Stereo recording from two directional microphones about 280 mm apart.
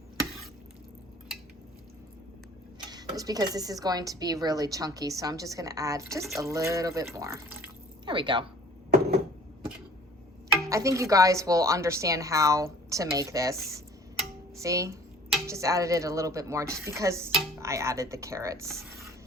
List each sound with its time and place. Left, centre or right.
2.9 s speech: centre
8.9 s a sound: right
10.6 s speech: centre